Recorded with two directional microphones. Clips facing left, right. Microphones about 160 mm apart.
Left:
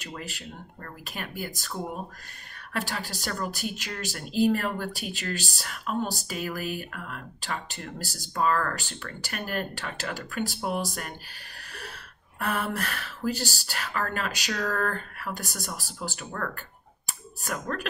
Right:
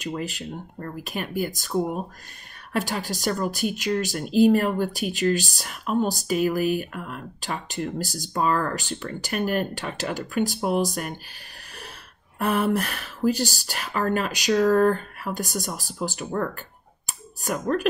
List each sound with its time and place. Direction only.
0.0 s speech: 15° right (ahead or behind)
2.7 s speech: 20° right (ahead or behind)
12.4 s speech: 20° right (ahead or behind)
17.5 s speech: 20° right (ahead or behind)